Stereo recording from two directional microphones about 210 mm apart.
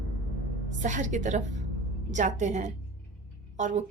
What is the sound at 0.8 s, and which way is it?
Speech, 35° right (ahead or behind).